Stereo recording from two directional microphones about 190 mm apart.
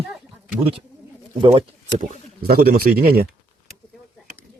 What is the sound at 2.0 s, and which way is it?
A man's voice, 50° right (ahead or behind).